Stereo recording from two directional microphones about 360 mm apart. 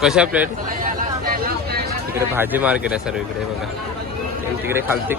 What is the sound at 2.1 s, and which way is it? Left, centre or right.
Speech, centre.